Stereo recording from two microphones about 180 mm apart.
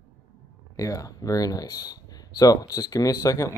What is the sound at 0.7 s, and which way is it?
Speech, 20° left (ahead or behind).